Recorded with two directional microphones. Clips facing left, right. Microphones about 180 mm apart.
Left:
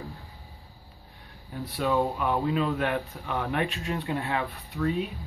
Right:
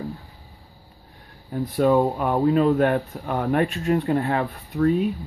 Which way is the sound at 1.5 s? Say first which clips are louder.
Right 8 dB; 45° right (ahead or behind).